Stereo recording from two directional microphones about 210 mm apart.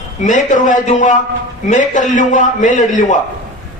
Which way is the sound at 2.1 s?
35° left (ahead or behind).